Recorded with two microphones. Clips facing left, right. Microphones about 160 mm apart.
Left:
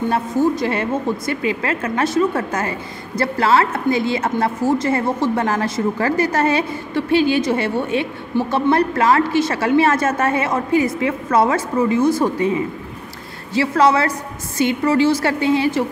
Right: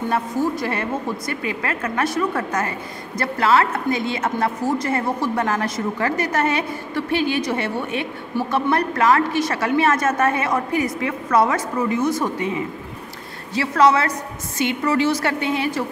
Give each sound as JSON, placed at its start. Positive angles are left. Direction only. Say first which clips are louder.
{"t": 0.1, "sound": "a woman's voice", "louder": "left 3 dB", "side_deg": 25}
{"t": 13.6, "sound": "a woman's voice", "louder": "left 2 dB", "side_deg": 30}